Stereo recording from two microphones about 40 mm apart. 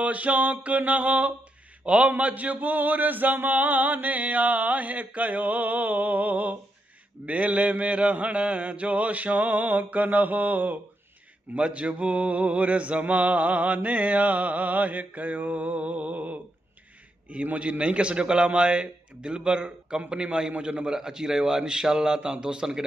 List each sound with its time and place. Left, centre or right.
0.0 s mantra: right
7.2 s mantra: right
11.5 s mantra: right
17.3 s a man's voice: right